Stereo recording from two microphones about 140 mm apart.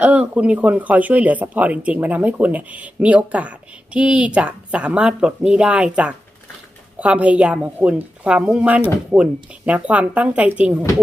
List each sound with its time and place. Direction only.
0.0 s speech: 10° right (ahead or behind)